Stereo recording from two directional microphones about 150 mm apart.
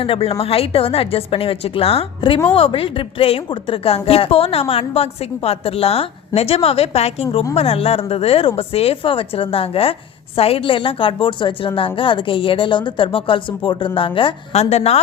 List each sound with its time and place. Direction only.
0.0 s speech: 40° left (ahead or behind)